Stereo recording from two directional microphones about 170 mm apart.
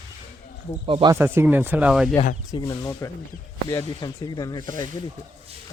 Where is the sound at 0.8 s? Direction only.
30° right (ahead or behind).